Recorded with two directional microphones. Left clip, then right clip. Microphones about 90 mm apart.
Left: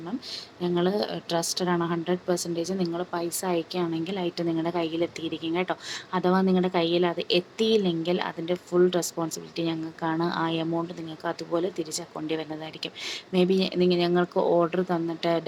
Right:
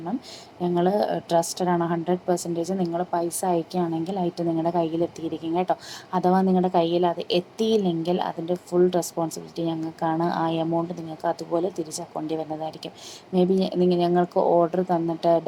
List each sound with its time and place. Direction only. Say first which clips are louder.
0.6 s speech: right 4 dB; 20° right (ahead or behind)
9.2 s speech: right 4 dB; 10° right (ahead or behind)
9.6 s speech: right 3 dB; 25° right (ahead or behind)